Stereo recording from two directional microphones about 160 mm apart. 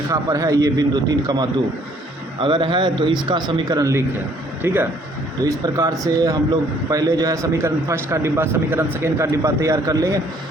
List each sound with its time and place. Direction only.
0.1 s a man's voice: 20° right (ahead or behind)